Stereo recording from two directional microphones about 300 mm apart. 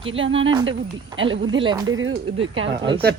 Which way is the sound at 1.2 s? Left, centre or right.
Centre.